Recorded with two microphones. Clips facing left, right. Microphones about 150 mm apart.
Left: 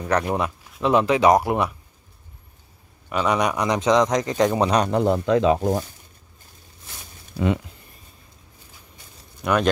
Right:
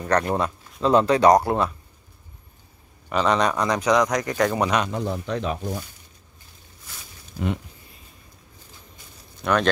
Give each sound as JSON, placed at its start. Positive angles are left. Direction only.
{"t": 0.0, "sound": "speech", "side_deg": 10}
{"t": 3.1, "sound": "speech", "side_deg": 10}
{"t": 4.8, "sound": "speech", "side_deg": 80}
{"t": 9.4, "sound": "speech", "side_deg": 10}